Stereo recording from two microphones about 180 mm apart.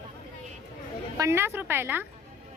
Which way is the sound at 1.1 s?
15° right (ahead or behind).